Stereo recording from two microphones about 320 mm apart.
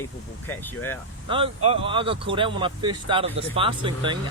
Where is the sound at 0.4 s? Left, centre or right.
Centre.